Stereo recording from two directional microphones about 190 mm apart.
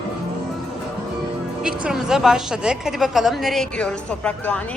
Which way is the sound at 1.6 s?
5° right (ahead or behind).